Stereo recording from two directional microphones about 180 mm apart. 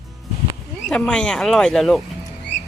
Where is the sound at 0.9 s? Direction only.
5° left (ahead or behind).